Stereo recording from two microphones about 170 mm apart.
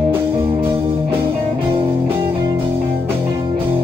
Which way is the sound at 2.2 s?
30° right (ahead or behind).